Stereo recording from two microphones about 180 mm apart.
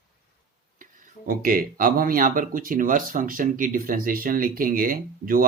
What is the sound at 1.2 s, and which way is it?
Speech, 50° right (ahead or behind).